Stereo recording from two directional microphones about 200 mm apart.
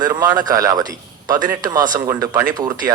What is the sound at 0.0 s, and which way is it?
A man's voice, 20° right (ahead or behind).